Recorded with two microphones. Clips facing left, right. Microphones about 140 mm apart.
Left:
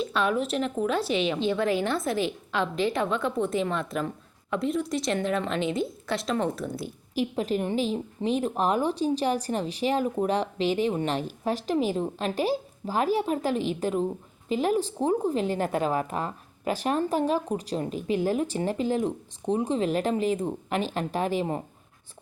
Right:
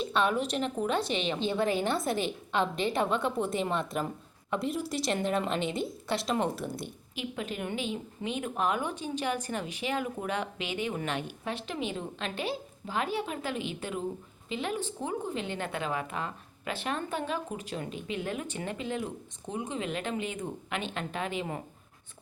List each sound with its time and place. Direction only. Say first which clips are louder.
0.0 s a woman's voice: left 2 dB; centre (ahead or behind)
6.8 s speech: left 9 dB; 35° left (ahead or behind)